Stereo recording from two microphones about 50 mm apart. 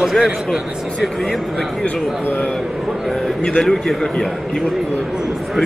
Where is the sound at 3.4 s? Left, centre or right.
Centre.